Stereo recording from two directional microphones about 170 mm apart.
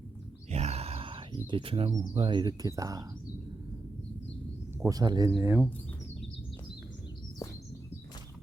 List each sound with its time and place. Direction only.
0.5 s a sound: 40° right (ahead or behind)
1.5 s speech: 30° right (ahead or behind)
4.8 s speech: 20° right (ahead or behind)